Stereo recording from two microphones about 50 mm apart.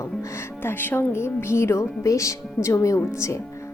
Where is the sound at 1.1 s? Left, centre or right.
Left.